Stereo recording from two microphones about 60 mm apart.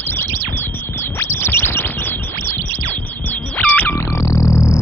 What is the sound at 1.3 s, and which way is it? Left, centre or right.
Chirp tone, left.